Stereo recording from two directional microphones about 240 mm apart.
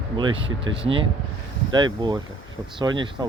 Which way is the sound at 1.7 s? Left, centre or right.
Centre.